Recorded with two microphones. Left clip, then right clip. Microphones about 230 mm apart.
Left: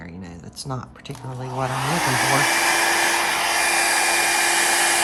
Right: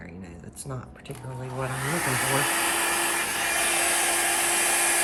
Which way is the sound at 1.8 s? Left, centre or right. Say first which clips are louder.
Left 6 dB; left.